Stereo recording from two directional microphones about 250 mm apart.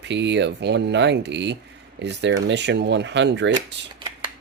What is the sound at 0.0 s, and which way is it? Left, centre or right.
Speech, right.